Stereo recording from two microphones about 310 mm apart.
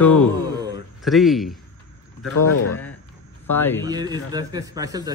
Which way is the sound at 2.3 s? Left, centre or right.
Left.